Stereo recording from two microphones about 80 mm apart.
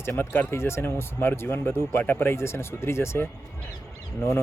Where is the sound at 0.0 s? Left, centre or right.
Left.